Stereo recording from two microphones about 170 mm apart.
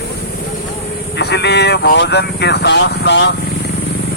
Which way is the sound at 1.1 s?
75° left (ahead or behind).